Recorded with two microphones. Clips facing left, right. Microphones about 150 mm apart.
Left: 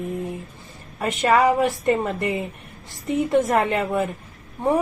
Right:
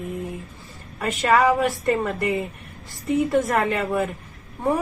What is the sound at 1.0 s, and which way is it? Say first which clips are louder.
A woman's voice: left 1 dB; 20° left (ahead or behind).